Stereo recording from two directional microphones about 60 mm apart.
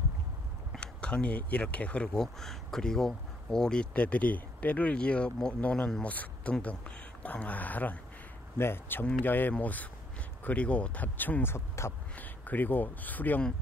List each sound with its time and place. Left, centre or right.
0.7 s speech: centre
2.1 s speech: centre; by 8.0 s left
8.5 s speech: left
11.5 s speech: left
12.2 s speech: left